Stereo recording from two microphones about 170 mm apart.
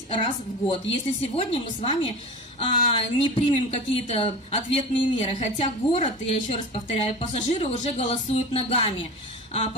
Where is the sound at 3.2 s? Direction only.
35° left (ahead or behind).